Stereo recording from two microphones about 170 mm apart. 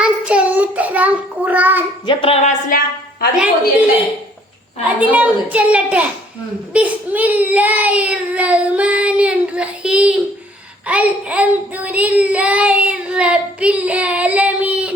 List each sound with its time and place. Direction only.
0.0 s child singing: 5° right (ahead or behind)
2.0 s a woman's voice: 35° left (ahead or behind)
2.6 s a woman's voice: 60° left (ahead or behind)
4.9 s child singing: 10° right (ahead or behind)